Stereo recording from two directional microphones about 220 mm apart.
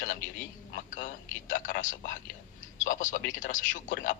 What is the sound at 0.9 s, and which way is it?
A man's voice, 35° left (ahead or behind).